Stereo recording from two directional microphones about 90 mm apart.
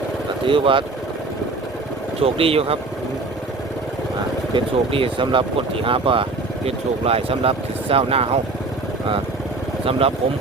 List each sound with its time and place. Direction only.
0.4 s speech: 75° right (ahead or behind)
2.2 s speech: 90° right
4.5 s speech: 90° right
7.0 s speech: 90° right